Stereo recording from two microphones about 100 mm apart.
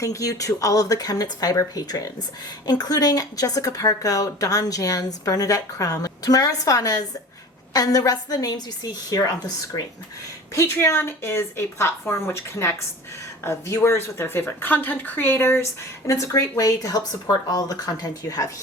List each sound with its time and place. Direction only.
0.0 s a woman's voice: 35° left (ahead or behind)